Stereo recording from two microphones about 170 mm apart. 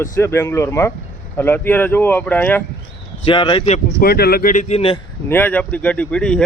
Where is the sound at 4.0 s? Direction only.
65° left (ahead or behind); by 5.0 s 35° left (ahead or behind).